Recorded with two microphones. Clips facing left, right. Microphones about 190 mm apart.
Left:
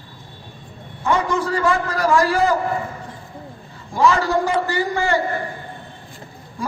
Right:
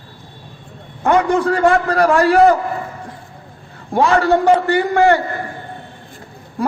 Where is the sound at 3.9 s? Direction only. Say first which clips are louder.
Right 4 dB; 60° right (ahead or behind).